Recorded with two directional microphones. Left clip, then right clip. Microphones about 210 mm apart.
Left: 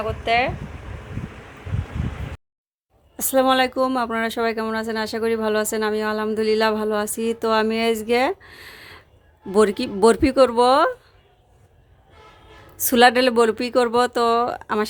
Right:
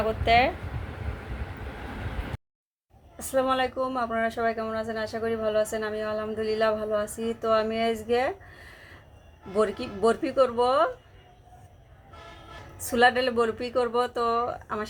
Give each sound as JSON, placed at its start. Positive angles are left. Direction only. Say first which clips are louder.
{"t": 0.0, "sound": "speech", "louder": "left 1 dB", "side_deg": 0}
{"t": 3.2, "sound": "speech", "louder": "left 7 dB", "side_deg": 55}
{"t": 12.9, "sound": "speech", "louder": "left 7 dB", "side_deg": 55}